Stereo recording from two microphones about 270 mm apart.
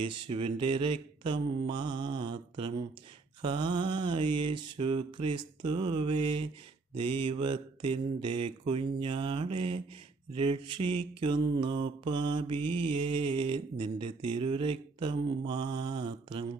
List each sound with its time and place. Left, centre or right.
0.1 s mantra: centre